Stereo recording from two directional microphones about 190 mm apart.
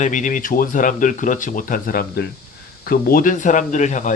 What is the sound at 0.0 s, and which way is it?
Speech, 40° left (ahead or behind).